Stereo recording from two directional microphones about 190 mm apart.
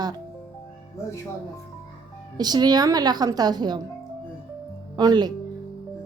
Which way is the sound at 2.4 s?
20° right (ahead or behind).